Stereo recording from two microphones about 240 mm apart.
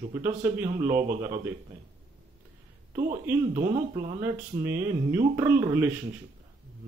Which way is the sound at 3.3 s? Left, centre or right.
Centre.